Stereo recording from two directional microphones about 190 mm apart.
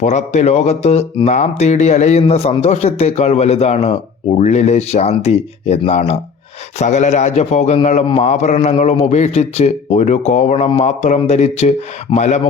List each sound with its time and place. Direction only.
0.0 s speech: 40° left (ahead or behind)